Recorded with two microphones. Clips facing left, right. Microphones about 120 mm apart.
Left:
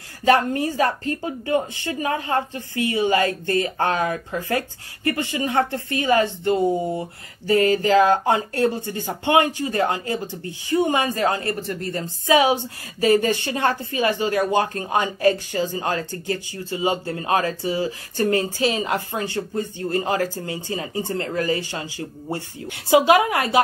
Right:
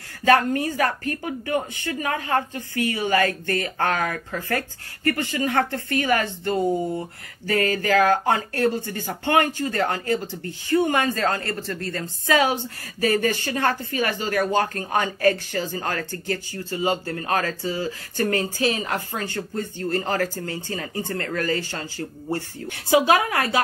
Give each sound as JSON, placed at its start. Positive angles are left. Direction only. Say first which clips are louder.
{"t": 0.2, "sound": "speech", "louder": "even", "side_deg": 20}